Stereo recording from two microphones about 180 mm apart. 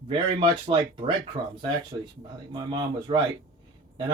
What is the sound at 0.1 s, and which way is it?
Speech, 25° right (ahead or behind).